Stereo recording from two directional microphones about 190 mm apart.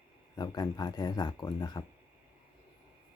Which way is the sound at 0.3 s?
20° left (ahead or behind).